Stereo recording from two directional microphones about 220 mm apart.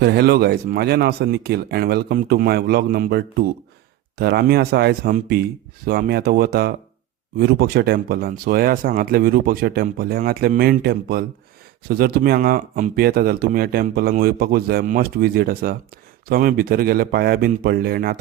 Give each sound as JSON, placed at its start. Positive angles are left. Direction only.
{"t": 0.0, "sound": "speech", "side_deg": -45}